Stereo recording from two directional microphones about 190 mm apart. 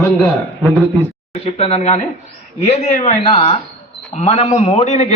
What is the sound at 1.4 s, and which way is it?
A man's voice, 30° left (ahead or behind).